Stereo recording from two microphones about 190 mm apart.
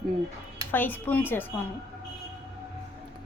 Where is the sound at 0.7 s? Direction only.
10° left (ahead or behind).